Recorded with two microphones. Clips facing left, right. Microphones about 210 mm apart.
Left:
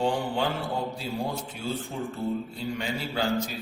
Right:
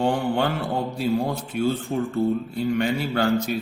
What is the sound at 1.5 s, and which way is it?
A man's voice, 65° right (ahead or behind).